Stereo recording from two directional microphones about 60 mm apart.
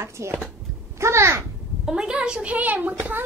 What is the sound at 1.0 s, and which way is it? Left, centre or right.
Babbling, right.